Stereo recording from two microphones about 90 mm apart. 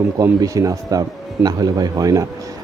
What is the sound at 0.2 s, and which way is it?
Speech, 35° right (ahead or behind).